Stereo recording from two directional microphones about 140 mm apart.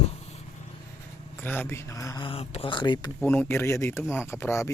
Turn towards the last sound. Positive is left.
turn(degrees=20)  # may be behind; listen again after turning